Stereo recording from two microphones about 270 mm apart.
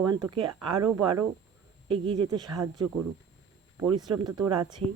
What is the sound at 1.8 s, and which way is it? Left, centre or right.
Speech, centre.